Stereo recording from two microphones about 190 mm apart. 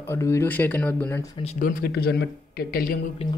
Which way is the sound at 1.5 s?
50° left (ahead or behind).